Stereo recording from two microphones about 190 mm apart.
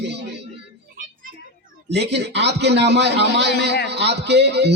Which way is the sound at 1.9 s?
65° right (ahead or behind).